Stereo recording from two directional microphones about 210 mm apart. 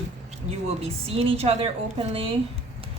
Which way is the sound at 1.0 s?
30° right (ahead or behind).